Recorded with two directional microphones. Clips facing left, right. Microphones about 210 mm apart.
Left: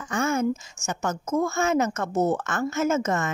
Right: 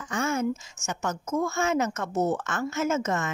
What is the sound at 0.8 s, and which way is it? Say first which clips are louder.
A woman's voice: left 3 dB; 45° left (ahead or behind).